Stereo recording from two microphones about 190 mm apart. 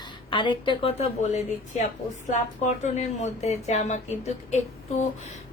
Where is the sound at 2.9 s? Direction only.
35° left (ahead or behind).